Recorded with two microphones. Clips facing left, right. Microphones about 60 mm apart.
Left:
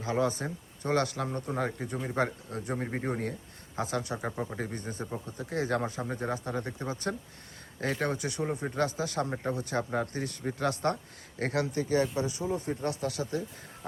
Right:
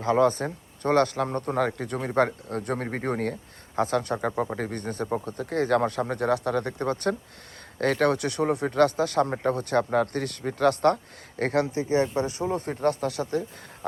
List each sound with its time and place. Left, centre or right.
0.0 s speech: right
11.7 s speech: right
12.1 s speech: right
12.5 s speech: right